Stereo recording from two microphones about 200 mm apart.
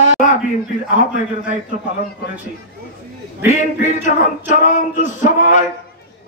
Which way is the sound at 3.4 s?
35° left (ahead or behind).